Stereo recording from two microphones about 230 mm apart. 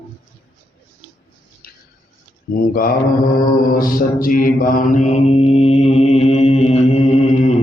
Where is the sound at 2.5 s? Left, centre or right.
Left.